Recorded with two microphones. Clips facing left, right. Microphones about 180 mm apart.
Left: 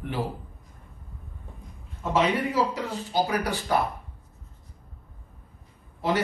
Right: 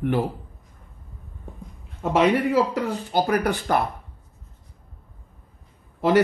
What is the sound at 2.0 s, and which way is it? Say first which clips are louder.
Speech: right 5 dB; 60° right (ahead or behind).